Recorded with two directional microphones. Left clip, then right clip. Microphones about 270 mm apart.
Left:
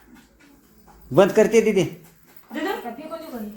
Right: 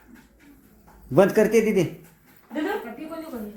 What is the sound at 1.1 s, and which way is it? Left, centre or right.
Speech, centre.